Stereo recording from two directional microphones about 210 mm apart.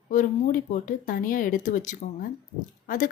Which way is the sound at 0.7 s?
40° left (ahead or behind).